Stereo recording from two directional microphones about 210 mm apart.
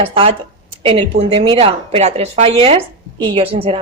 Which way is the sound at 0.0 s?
25° right (ahead or behind).